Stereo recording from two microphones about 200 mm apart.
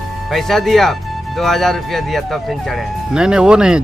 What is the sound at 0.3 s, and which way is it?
Speech, centre (ahead or behind).